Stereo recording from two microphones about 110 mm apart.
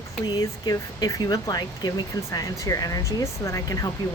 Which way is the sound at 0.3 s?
35° left (ahead or behind).